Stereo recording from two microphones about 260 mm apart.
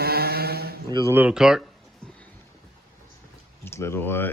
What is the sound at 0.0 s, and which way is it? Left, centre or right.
Mantra, right.